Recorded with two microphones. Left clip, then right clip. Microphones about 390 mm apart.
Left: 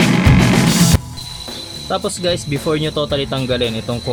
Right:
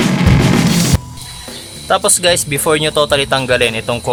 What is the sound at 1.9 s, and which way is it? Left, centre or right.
Speech, right.